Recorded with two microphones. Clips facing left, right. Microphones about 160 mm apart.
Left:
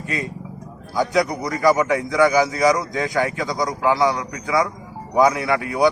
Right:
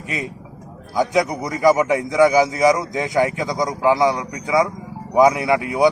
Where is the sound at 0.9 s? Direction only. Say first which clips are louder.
Right 1 dB; 15° right (ahead or behind).